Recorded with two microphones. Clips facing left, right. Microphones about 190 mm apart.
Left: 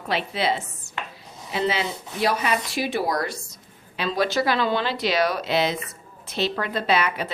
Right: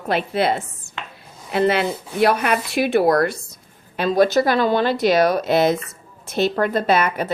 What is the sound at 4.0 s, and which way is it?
A woman's voice, 50° right (ahead or behind).